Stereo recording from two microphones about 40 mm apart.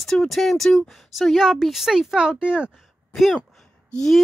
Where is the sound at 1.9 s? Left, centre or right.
Centre.